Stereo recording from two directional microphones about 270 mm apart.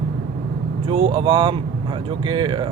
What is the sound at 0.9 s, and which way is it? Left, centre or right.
Speech, centre.